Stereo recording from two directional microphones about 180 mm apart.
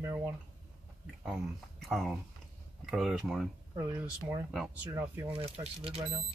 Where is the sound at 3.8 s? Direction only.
15° right (ahead or behind).